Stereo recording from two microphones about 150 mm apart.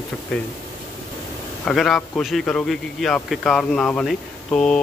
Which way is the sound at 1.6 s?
Centre (ahead or behind).